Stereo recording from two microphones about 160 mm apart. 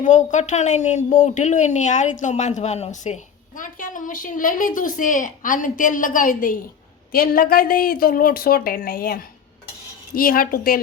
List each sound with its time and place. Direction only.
0.0 s a woman's voice: 50° left (ahead or behind)